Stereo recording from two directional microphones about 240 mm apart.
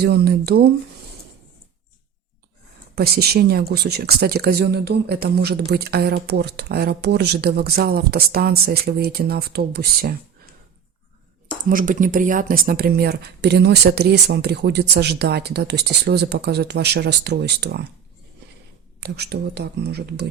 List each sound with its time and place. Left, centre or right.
0.0 s speech: right
2.9 s speech: right
11.7 s speech: right
18.9 s speech: right